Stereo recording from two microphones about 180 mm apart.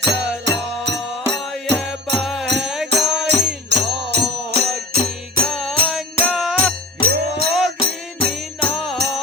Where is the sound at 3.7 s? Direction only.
70° right (ahead or behind).